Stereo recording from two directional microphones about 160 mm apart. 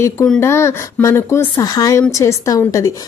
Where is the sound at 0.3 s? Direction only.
15° left (ahead or behind).